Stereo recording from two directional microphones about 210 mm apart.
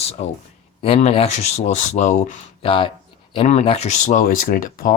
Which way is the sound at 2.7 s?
25° left (ahead or behind).